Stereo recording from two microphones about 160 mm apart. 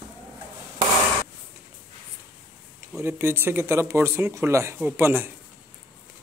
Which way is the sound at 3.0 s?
15° right (ahead or behind).